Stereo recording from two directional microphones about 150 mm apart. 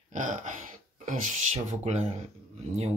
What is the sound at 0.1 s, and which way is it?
Throat clearing, 55° right (ahead or behind).